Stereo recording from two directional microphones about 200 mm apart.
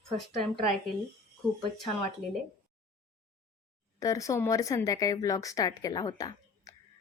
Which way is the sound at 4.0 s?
15° left (ahead or behind).